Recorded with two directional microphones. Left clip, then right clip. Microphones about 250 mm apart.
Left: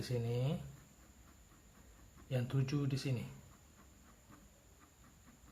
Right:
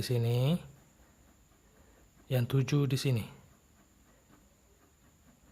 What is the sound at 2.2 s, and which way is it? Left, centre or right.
Speech, right.